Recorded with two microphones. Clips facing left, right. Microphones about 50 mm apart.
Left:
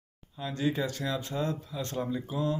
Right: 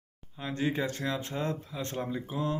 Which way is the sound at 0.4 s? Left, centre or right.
Right.